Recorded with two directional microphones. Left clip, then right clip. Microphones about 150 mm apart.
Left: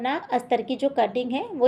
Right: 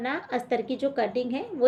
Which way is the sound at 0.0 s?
35° left (ahead or behind).